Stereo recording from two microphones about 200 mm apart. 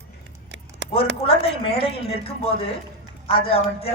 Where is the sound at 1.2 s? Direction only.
30° left (ahead or behind).